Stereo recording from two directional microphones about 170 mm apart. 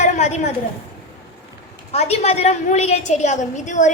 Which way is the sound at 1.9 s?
40° left (ahead or behind).